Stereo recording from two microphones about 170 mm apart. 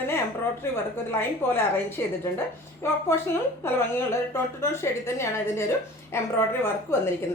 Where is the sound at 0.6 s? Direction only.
15° left (ahead or behind).